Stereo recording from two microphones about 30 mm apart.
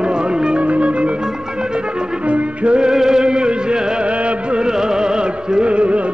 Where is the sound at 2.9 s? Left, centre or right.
Right.